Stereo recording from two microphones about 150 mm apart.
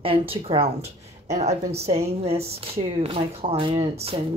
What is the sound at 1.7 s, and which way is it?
Speech, 45° right (ahead or behind).